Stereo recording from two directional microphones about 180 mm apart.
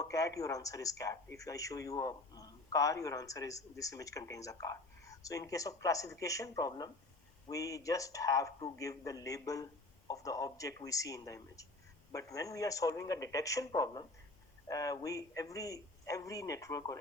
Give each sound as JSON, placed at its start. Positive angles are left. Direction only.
{"t": 0.0, "sound": "speech", "side_deg": 20}